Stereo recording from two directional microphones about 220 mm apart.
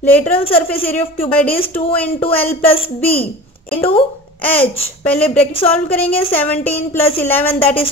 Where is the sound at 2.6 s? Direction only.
25° left (ahead or behind).